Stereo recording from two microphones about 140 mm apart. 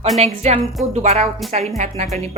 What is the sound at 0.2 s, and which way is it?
A woman's voice, 50° right (ahead or behind).